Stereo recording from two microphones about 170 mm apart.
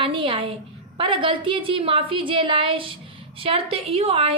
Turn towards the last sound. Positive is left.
turn(degrees=-35)  # may be behind; listen again after turning